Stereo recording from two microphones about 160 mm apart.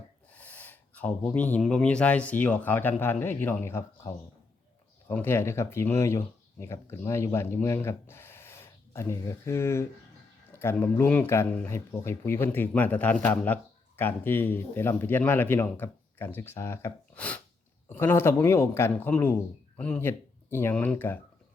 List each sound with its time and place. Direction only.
0.3 s speech: 10° left (ahead or behind)